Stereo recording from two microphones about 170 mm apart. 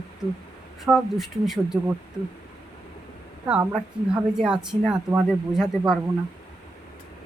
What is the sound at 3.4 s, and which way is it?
Speech, 5° right (ahead or behind).